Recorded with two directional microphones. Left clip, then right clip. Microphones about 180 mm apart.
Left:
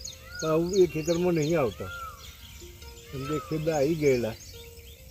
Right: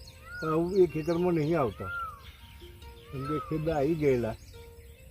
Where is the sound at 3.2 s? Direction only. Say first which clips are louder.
Left 2 dB; 15° right (ahead or behind).